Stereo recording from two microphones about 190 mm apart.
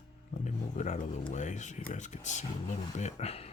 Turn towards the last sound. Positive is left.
turn(degrees=35)  # may be behind; listen again after turning